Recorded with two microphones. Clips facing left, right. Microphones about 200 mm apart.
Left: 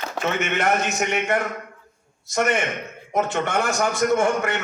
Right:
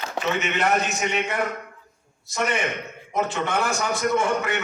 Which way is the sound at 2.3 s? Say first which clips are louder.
Left 3 dB; 50° left (ahead or behind).